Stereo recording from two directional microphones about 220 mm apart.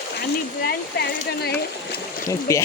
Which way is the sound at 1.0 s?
45° left (ahead or behind).